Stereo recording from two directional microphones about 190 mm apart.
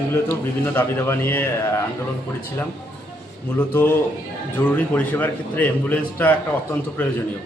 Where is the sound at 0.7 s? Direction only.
10° left (ahead or behind).